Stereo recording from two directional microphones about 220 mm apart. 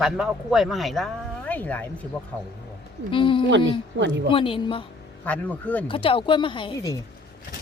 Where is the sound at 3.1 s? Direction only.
25° left (ahead or behind).